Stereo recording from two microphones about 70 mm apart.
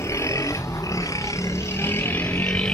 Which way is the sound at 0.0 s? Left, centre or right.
Left.